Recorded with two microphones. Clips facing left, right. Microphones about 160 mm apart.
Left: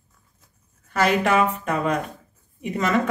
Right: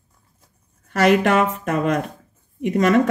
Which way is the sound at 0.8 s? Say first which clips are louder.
Right 4 dB; 70° right (ahead or behind).